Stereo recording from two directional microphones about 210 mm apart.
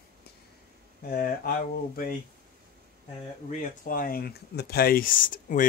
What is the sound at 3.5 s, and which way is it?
Speech, 40° left (ahead or behind).